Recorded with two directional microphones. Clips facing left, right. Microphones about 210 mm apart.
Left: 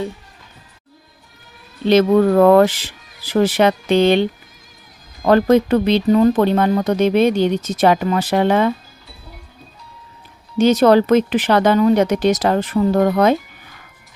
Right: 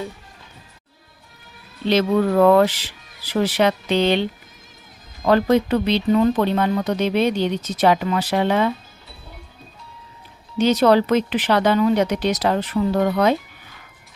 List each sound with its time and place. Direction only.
1.9 s speech: 45° left (ahead or behind)
10.6 s speech: 45° left (ahead or behind)